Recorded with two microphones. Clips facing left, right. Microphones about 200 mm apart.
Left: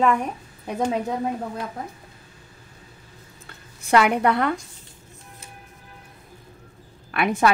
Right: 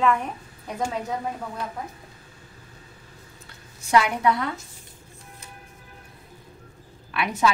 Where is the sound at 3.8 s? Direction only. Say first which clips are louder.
Left 2 dB; 60° left (ahead or behind).